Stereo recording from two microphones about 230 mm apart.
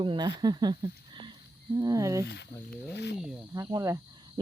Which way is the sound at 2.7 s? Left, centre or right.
Left.